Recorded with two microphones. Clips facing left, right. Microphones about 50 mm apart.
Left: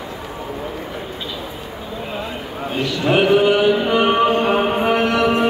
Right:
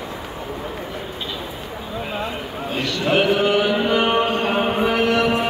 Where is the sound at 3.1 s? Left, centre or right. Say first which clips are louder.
Left 4 dB; centre.